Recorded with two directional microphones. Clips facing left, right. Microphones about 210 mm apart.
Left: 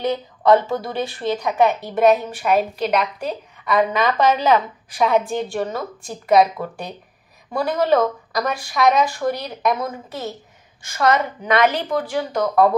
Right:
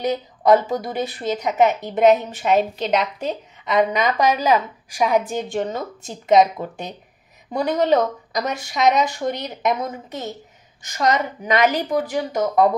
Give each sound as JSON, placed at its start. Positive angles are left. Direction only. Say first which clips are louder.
{"t": 0.4, "sound": "a woman's voice", "louder": "even", "side_deg": -15}